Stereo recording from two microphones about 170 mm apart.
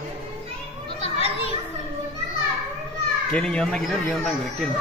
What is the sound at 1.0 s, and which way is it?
Children playing, 35° left (ahead or behind).